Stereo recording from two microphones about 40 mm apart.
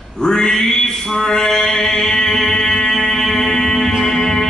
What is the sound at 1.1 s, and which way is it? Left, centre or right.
Music, centre.